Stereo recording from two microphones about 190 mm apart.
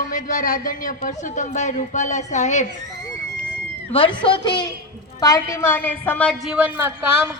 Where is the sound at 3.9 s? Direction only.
30° left (ahead or behind).